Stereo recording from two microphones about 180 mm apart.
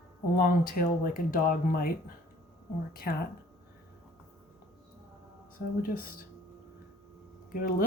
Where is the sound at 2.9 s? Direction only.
55° left (ahead or behind).